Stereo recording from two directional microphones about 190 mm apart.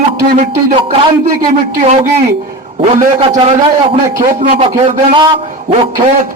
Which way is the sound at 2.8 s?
30° right (ahead or behind).